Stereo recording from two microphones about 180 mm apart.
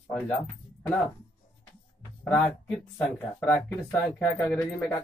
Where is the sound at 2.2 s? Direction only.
10° left (ahead or behind).